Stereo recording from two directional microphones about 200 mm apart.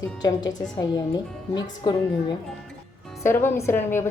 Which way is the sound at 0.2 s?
20° left (ahead or behind).